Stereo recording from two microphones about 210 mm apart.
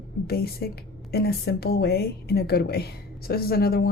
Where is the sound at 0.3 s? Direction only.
45° left (ahead or behind).